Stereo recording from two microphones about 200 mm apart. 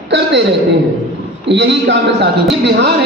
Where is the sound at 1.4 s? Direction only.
60° right (ahead or behind).